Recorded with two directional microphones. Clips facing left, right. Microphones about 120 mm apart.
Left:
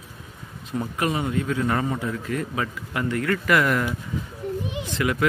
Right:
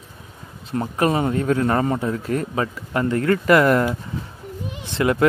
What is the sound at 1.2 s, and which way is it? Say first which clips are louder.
A man's voice: right 5 dB; 45° right (ahead or behind).